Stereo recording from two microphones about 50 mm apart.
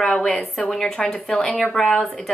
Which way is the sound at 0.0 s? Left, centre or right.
Centre.